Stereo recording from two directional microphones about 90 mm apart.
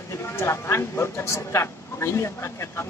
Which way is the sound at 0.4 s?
30° left (ahead or behind).